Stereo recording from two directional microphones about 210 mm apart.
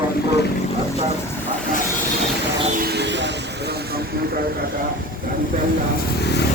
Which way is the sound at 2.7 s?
50° right (ahead or behind).